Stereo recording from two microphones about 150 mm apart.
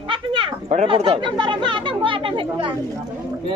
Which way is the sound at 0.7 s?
45° right (ahead or behind).